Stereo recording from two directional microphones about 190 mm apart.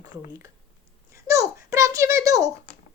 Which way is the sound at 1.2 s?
15° right (ahead or behind).